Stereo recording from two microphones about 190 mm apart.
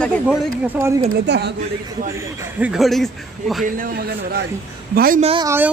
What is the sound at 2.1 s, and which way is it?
A man's voice, 5° right (ahead or behind).